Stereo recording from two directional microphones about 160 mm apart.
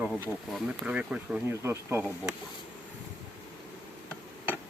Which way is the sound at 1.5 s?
15° right (ahead or behind).